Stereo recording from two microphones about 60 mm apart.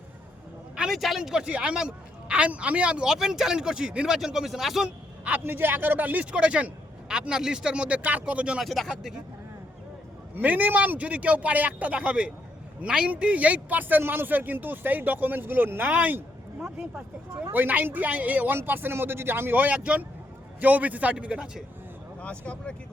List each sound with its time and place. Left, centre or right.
0.8 s speech: centre
5.4 s speech: right
6.3 s a man's voice: centre
8.6 s speech: centre
10.3 s a man's voice: right
17.5 s a man's voice: right
19.5 s a man's voice: right
22.2 s speech: left